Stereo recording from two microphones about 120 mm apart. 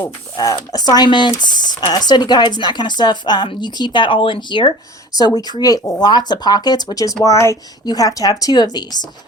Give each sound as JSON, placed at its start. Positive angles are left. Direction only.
{"t": 0.3, "sound": "speech", "side_deg": 35}